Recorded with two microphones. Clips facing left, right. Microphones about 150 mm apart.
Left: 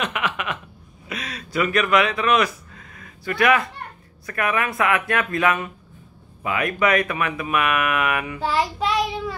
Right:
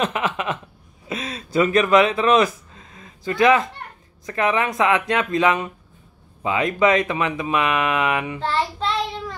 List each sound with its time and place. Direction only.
0.0 s a sound: 30° right (ahead or behind)
4.3 s speech: 20° right (ahead or behind)
8.4 s child singing: 10° left (ahead or behind)